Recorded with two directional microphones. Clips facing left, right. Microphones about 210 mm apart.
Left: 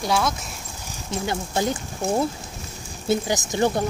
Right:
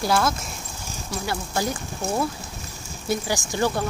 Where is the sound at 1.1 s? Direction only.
20° left (ahead or behind).